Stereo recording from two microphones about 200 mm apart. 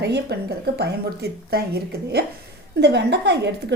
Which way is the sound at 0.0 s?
55° right (ahead or behind).